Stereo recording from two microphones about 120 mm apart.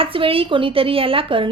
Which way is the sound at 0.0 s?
50° right (ahead or behind).